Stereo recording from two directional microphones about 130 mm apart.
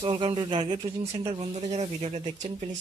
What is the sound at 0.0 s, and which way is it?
Speech, 45° right (ahead or behind).